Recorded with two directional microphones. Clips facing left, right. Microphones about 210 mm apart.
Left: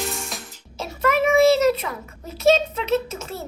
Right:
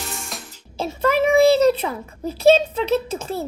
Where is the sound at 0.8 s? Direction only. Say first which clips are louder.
Right 2 dB; 30° right (ahead or behind).